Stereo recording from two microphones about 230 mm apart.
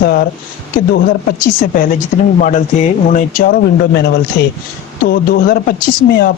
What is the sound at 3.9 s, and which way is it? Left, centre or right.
Speech, left.